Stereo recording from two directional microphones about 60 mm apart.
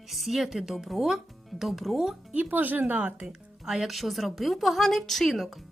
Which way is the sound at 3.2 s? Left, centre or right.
Centre.